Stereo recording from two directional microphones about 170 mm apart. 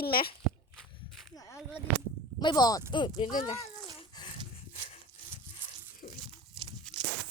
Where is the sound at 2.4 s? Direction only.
25° left (ahead or behind).